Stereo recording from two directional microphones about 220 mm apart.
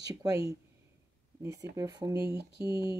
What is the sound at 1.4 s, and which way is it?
Speech, 15° right (ahead or behind).